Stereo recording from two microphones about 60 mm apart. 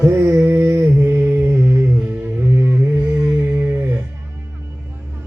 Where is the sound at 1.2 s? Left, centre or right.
Right.